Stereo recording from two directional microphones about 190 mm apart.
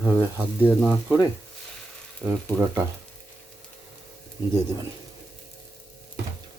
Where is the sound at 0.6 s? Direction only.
10° right (ahead or behind).